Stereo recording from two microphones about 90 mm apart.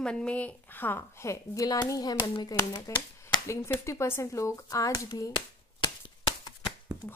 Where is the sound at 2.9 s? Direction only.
35° left (ahead or behind).